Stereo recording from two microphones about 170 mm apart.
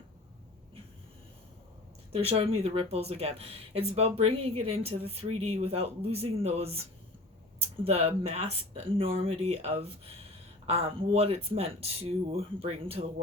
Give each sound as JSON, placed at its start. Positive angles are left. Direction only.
{"t": 2.1, "sound": "speech", "side_deg": -35}
{"t": 7.9, "sound": "speech", "side_deg": -35}